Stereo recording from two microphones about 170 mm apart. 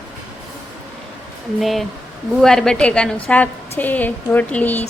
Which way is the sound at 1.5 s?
Centre (ahead or behind).